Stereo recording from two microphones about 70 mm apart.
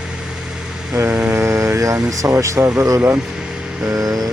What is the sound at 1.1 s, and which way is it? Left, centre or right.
Vehicle, right.